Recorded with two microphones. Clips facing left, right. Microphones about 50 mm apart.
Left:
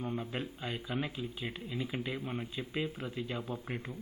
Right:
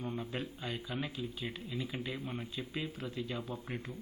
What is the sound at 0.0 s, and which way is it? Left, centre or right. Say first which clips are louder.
A man's voice: left 2 dB; left.